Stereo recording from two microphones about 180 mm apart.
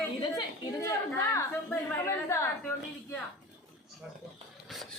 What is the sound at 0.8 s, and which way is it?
A woman's voice, 15° left (ahead or behind).